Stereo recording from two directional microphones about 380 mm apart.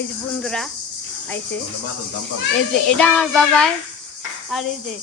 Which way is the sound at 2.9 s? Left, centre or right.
Centre.